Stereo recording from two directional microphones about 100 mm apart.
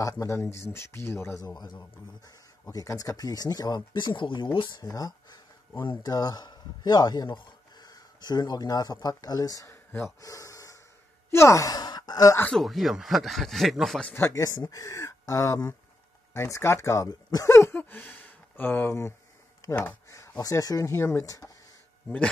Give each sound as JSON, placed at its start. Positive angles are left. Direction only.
{"t": 0.0, "sound": "speech", "side_deg": 30}
{"t": 4.8, "sound": "speech", "side_deg": 40}
{"t": 9.7, "sound": "speech", "side_deg": 25}
{"t": 10.2, "sound": "snort", "side_deg": 35}
{"t": 11.3, "sound": "speech", "side_deg": 30}
{"t": 12.4, "sound": "speech", "side_deg": 0}
{"t": 14.1, "sound": "speech", "side_deg": 25}
{"t": 14.4, "sound": "speech", "side_deg": 35}
{"t": 17.7, "sound": "speech", "side_deg": 15}
{"t": 20.1, "sound": "speech", "side_deg": 35}